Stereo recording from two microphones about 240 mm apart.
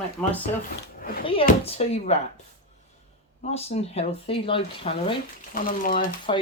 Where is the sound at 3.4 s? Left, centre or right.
Left.